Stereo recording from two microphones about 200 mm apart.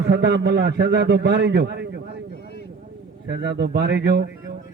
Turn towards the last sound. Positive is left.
turn(degrees=-55)  # may be behind; listen again after turning